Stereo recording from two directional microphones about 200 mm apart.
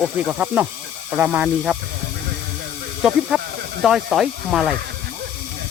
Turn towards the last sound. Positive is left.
turn(degrees=0)  # may be behind; listen again after turning